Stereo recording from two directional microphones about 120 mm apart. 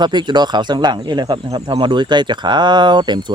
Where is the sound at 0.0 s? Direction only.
40° right (ahead or behind).